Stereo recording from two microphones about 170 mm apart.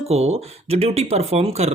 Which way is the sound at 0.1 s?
35° right (ahead or behind).